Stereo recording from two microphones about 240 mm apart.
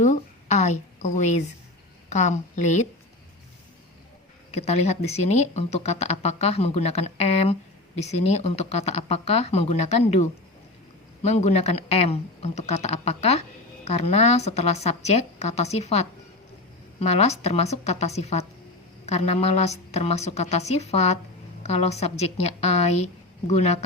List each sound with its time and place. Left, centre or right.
0.0 s a woman's voice: left
4.5 s speech: left